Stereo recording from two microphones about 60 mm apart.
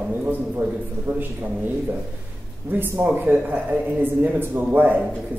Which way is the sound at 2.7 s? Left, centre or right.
Right.